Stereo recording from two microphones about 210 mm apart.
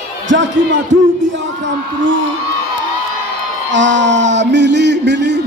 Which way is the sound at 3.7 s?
60° right (ahead or behind).